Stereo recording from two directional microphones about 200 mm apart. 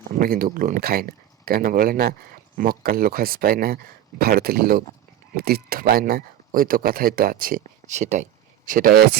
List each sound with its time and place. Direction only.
0.2 s speech: 45° right (ahead or behind)